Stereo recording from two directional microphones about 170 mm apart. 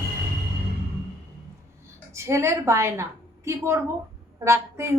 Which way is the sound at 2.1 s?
15° right (ahead or behind).